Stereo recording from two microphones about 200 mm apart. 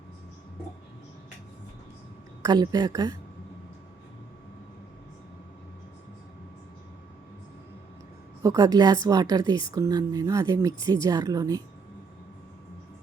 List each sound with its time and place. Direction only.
2.4 s speech: 20° right (ahead or behind)
8.4 s a woman's voice: 15° right (ahead or behind)